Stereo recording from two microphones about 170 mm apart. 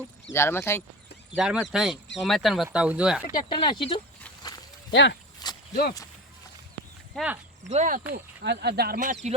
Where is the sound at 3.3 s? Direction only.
25° left (ahead or behind).